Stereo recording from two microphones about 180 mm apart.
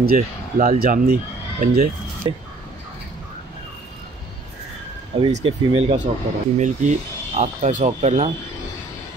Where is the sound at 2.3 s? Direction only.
25° right (ahead or behind).